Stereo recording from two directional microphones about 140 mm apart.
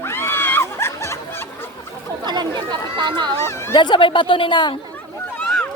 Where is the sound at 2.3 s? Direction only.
30° right (ahead or behind).